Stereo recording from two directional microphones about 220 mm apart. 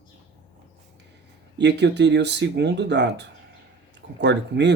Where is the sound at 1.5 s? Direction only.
50° right (ahead or behind).